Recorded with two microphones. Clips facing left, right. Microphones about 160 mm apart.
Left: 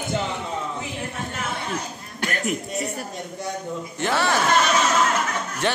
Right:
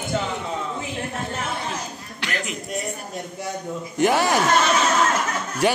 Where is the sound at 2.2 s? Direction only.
45° left (ahead or behind).